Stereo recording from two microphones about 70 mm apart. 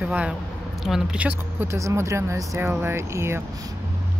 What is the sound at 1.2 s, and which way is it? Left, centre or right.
Speech, right.